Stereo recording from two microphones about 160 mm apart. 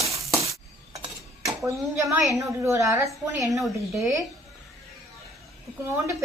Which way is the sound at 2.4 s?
20° right (ahead or behind).